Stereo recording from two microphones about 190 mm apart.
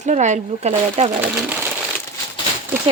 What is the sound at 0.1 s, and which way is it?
Speech, 40° right (ahead or behind).